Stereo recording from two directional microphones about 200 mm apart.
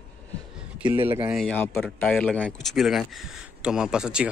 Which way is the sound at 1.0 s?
25° right (ahead or behind).